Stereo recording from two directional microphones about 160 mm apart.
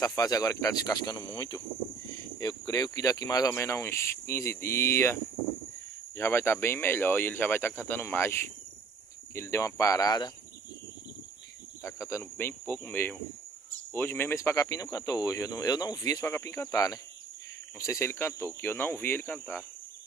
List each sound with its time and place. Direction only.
0.0 s speech: 20° left (ahead or behind)
11.8 s speech: 20° left (ahead or behind)